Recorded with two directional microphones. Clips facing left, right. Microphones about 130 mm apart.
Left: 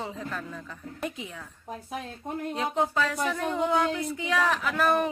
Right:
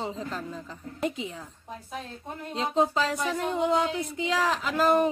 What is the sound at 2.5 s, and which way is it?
Female singing, 25° right (ahead or behind).